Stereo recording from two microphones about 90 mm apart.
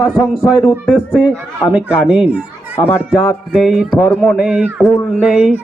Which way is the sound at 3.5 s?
5° right (ahead or behind).